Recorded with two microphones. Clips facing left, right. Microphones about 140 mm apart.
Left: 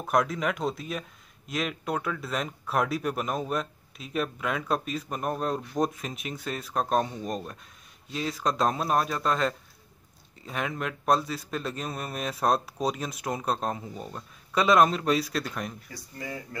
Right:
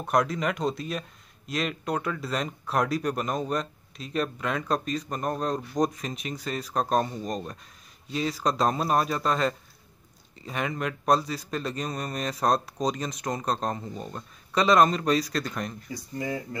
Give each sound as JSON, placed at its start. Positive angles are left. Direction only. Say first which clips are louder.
{"t": 0.0, "sound": "speech", "louder": "right 1 dB", "side_deg": 0}
{"t": 15.9, "sound": "speech", "louder": "right 7 dB", "side_deg": -20}